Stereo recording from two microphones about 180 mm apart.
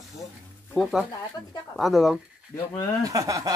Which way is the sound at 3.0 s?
20° right (ahead or behind).